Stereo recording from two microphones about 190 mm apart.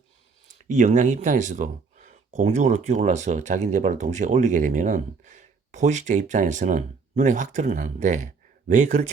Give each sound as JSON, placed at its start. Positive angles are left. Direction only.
{"t": 0.4, "sound": "speech", "side_deg": -40}